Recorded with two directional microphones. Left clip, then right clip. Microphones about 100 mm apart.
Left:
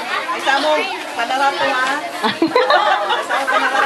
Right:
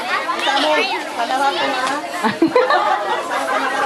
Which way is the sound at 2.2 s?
25° left (ahead or behind).